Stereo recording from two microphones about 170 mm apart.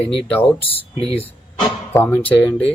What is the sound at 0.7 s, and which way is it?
Speech, 35° left (ahead or behind).